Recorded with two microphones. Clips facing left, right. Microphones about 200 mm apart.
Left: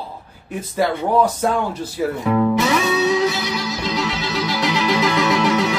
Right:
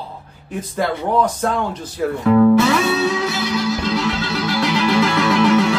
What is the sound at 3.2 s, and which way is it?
Music, 15° left (ahead or behind).